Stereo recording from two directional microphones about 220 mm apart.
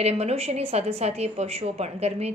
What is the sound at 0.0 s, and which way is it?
A woman's voice, 30° right (ahead or behind).